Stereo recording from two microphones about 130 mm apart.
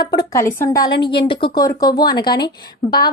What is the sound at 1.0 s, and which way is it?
Speech, 40° left (ahead or behind).